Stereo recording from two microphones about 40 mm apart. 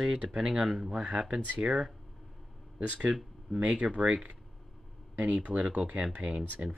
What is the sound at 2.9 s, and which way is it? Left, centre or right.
Speech, right.